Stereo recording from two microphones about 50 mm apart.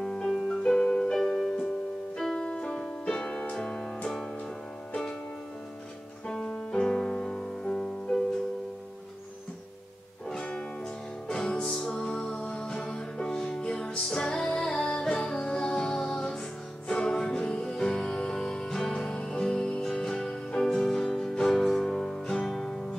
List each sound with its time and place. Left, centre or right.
0.0 s music: centre
6.2 s music: left
10.3 s music: centre